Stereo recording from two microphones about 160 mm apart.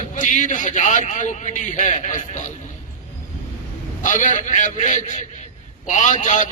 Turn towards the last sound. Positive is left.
turn(degrees=55)  # may be behind; listen again after turning